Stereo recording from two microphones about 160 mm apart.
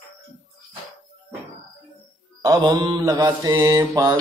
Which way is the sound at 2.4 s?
20° right (ahead or behind).